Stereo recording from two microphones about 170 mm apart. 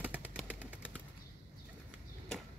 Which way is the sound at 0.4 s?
10° right (ahead or behind).